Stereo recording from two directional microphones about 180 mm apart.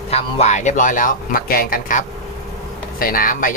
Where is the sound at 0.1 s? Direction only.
40° left (ahead or behind).